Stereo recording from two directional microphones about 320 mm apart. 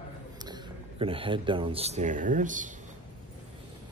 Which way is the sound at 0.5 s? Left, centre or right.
Centre.